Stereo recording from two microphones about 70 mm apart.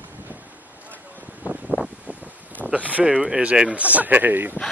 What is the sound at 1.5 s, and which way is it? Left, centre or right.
Wind, centre.